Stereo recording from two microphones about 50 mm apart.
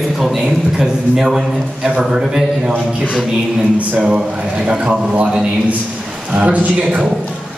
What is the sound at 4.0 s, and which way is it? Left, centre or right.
A man's voice, centre.